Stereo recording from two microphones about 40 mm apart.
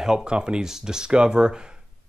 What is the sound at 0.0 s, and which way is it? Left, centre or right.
Speech, centre.